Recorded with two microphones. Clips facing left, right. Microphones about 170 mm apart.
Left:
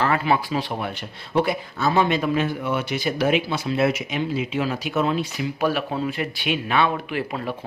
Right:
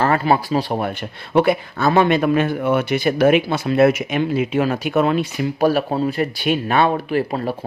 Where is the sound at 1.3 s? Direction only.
65° right (ahead or behind).